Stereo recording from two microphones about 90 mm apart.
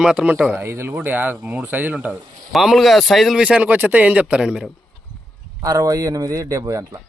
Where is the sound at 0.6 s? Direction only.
30° right (ahead or behind).